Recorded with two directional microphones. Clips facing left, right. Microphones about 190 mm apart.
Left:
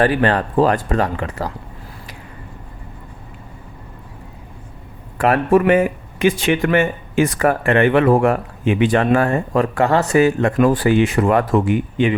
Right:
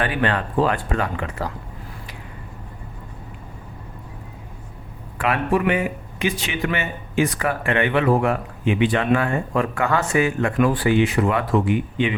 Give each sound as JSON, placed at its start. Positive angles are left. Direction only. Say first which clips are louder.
{"t": 0.0, "sound": "speech", "louder": "left 6 dB", "side_deg": 40}
{"t": 5.1, "sound": "speech", "louder": "left 6 dB", "side_deg": 40}